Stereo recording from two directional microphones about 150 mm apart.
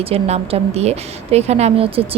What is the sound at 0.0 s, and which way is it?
A woman's voice, 40° right (ahead or behind).